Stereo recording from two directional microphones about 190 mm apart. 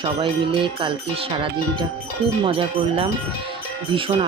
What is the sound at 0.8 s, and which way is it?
Speech, 30° right (ahead or behind).